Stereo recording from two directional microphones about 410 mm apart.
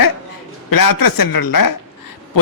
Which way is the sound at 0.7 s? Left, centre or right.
Left.